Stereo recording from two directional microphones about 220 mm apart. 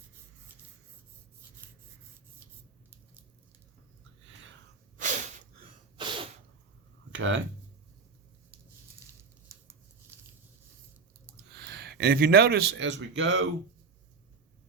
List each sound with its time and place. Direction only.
4.9 s a sound: 35° right (ahead or behind)
6.0 s sneeze: 20° right (ahead or behind)
7.2 s speech: 60° right (ahead or behind)
10.1 s biting: 10° right (ahead or behind)
11.5 s speech: 45° right (ahead or behind)